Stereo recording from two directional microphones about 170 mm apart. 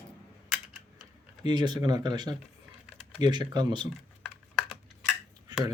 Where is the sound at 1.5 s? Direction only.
25° right (ahead or behind).